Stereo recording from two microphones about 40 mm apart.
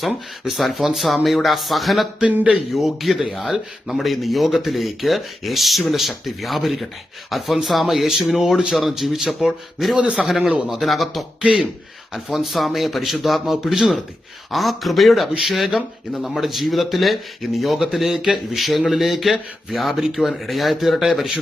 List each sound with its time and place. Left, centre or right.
0.6 s speech: centre
10.2 s speech: centre
11.4 s speech: right
12.1 s speech: centre